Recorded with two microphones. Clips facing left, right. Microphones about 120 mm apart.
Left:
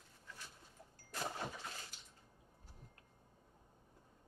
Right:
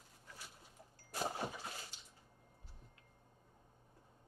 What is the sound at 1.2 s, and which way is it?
Vehicle, 30° right (ahead or behind).